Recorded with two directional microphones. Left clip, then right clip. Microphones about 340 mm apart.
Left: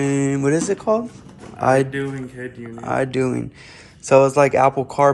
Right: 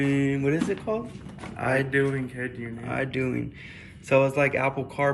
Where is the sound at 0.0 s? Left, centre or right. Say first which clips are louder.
Left 5 dB; centre.